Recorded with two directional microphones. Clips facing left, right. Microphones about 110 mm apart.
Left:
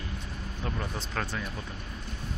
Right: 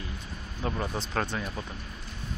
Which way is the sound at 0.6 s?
10° right (ahead or behind).